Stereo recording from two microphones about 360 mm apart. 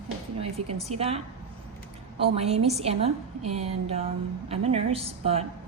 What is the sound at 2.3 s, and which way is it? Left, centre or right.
A woman's voice, centre.